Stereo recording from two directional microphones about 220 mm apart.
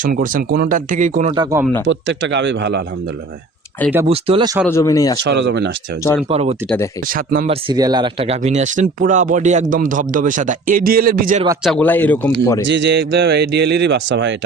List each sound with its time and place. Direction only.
0.0 s speech: 35° right (ahead or behind)
1.4 s speech: 15° right (ahead or behind)
1.9 s speech: 55° right (ahead or behind)
4.1 s speech: 25° right (ahead or behind)
4.7 s speech: 15° left (ahead or behind)
5.2 s speech: 55° right (ahead or behind)
6.2 s speech: 30° right (ahead or behind)
7.1 s speech: 40° right (ahead or behind)
7.5 s speech: 20° right (ahead or behind); by 11.4 s 40° right (ahead or behind)
11.6 s speech: 5° left (ahead or behind)
12.6 s speech: 55° right (ahead or behind)